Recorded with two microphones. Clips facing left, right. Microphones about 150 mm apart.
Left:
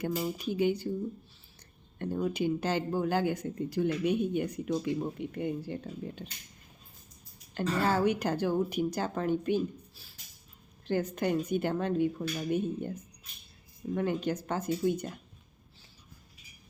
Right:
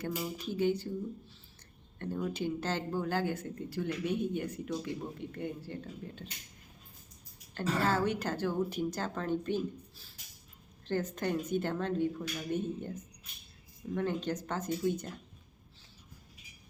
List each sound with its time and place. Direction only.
0.3 s speech: 15° left (ahead or behind)
2.0 s speech: 15° left (ahead or behind)
7.5 s speech: 15° left (ahead or behind)